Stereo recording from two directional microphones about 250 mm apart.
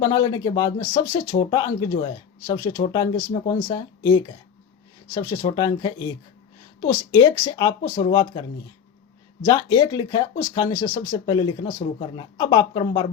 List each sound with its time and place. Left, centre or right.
0.0 s speech: centre
9.5 s speech: centre